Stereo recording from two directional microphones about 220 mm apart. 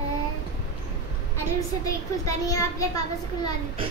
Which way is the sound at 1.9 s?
15° left (ahead or behind).